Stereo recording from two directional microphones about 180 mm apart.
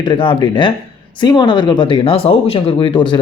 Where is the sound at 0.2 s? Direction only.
25° left (ahead or behind).